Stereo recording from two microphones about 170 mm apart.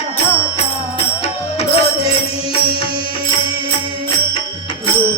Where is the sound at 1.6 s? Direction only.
35° left (ahead or behind).